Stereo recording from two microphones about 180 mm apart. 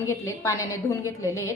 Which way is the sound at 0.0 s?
15° left (ahead or behind).